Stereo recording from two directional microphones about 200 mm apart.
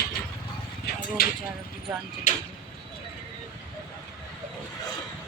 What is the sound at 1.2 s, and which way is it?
Speech, 50° left (ahead or behind).